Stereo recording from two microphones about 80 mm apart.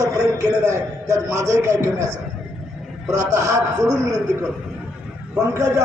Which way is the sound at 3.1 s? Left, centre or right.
Right.